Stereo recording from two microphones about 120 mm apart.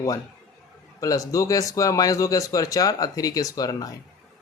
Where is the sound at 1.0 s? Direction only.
30° left (ahead or behind).